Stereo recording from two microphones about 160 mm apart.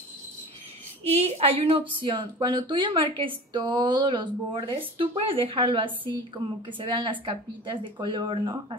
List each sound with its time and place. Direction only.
1.0 s speech: 40° right (ahead or behind)